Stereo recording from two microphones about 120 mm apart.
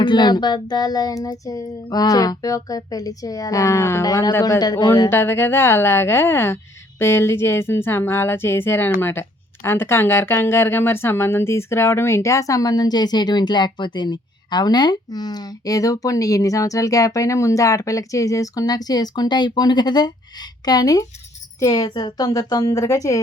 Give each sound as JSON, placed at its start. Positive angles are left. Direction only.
{"t": 0.0, "sound": "child singing", "side_deg": 40}
{"t": 5.0, "sound": "speech", "side_deg": 20}
{"t": 21.6, "sound": "child singing", "side_deg": 35}